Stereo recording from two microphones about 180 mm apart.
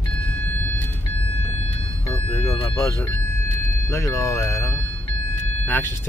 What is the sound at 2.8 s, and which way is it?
Speech, 15° left (ahead or behind).